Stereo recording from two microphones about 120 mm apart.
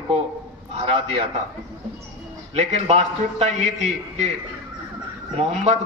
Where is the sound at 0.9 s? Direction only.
55° right (ahead or behind).